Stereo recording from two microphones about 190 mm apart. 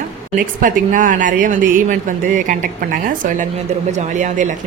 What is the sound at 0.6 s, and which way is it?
Speech, 45° right (ahead or behind).